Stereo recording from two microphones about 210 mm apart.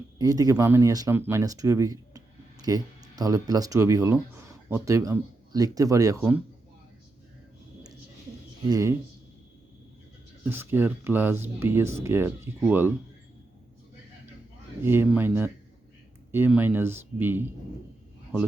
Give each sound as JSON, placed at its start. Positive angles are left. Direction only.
{"t": 0.2, "sound": "speech", "side_deg": -15}
{"t": 8.7, "sound": "speech", "side_deg": -15}
{"t": 10.4, "sound": "speech", "side_deg": -10}
{"t": 14.8, "sound": "speech", "side_deg": -10}